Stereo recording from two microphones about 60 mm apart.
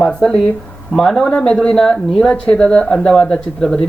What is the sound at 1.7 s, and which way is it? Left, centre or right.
A man's voice, centre.